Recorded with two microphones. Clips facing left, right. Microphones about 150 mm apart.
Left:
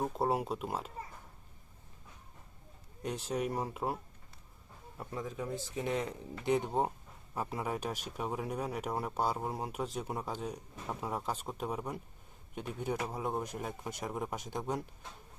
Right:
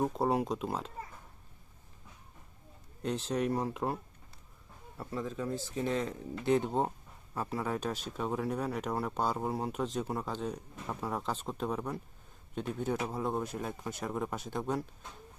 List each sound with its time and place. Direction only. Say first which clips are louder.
0.0 s speech: right 2 dB; centre (ahead or behind)
3.0 s speech: right 3 dB; 10° left (ahead or behind)
4.9 s speech: right 3 dB; 15° left (ahead or behind)